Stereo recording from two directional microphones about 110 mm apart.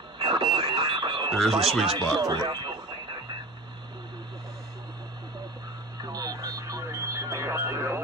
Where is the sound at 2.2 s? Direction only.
40° right (ahead or behind).